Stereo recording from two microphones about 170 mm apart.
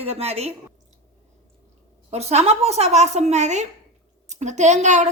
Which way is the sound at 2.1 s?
40° right (ahead or behind).